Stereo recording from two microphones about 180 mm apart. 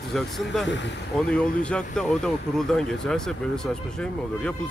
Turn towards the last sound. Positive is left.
turn(degrees=5)  # may be behind; listen again after turning